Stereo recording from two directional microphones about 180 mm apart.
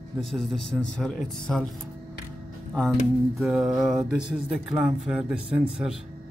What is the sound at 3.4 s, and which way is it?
Speech, centre (ahead or behind).